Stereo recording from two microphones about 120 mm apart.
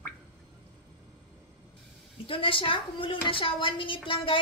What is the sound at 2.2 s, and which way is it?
A woman's voice, 50° left (ahead or behind).